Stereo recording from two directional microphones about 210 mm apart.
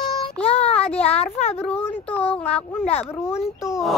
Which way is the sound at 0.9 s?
30° left (ahead or behind).